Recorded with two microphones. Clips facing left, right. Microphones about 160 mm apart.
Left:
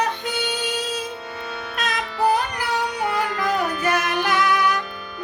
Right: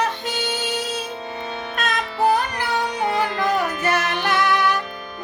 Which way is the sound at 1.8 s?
10° left (ahead or behind).